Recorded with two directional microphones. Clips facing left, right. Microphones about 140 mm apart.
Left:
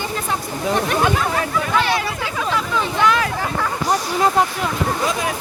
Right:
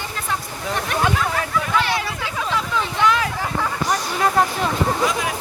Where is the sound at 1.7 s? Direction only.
15° left (ahead or behind).